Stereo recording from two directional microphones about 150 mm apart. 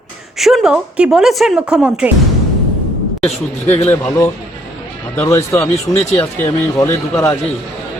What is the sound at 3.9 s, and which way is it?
Speech, 15° left (ahead or behind).